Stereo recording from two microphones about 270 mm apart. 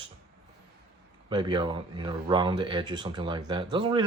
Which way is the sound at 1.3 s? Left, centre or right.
Centre.